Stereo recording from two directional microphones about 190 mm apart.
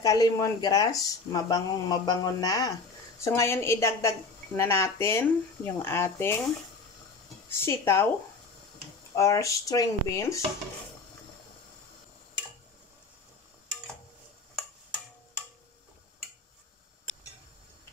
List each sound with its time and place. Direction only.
0.0 s speech: 20° left (ahead or behind)
7.4 s speech: 15° left (ahead or behind)
9.1 s speech: 15° left (ahead or behind)